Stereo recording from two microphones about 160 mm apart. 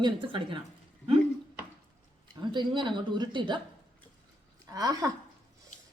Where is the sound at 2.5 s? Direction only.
30° right (ahead or behind).